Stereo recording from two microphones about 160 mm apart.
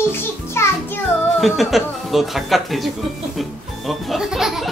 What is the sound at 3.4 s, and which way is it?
Music, centre (ahead or behind).